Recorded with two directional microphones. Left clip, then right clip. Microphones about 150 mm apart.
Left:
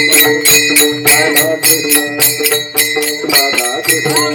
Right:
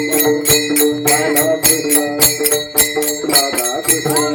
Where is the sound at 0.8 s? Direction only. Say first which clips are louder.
Left 4 dB; 55° left (ahead or behind).